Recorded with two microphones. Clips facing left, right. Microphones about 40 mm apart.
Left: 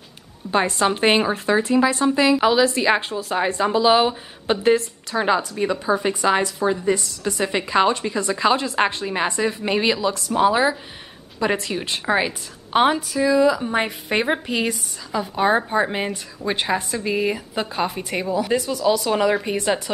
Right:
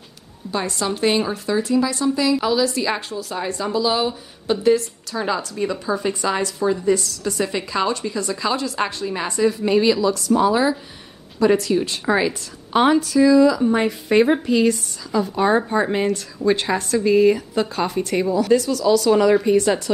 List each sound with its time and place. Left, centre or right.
0.5 s a woman's voice: left